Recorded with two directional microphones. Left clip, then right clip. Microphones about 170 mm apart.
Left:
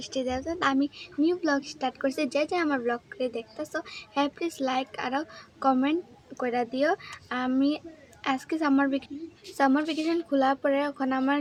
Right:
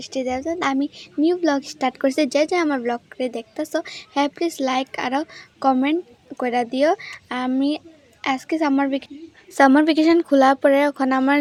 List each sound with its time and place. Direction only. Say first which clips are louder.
0.0 s a woman's voice: right 6 dB; 35° right (ahead or behind)
9.6 s speech: right 10 dB; 65° right (ahead or behind)